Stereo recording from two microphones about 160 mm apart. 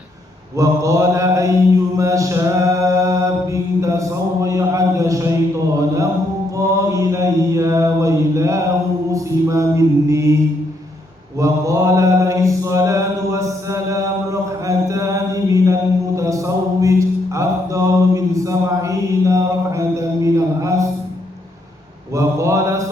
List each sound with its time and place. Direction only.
0.5 s mantra: 20° right (ahead or behind)
6.6 s mantra: 20° right (ahead or behind)
11.3 s mantra: 20° right (ahead or behind)
22.1 s mantra: 20° right (ahead or behind)